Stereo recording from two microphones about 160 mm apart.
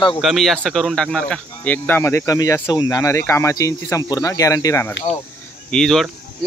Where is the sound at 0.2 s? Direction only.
Centre (ahead or behind); by 4.8 s 20° left (ahead or behind).